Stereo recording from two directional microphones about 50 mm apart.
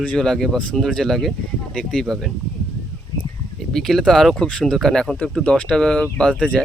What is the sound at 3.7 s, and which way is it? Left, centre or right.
Speech, centre.